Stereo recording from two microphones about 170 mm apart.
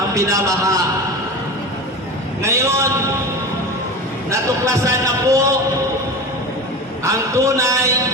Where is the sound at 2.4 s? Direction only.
15° right (ahead or behind).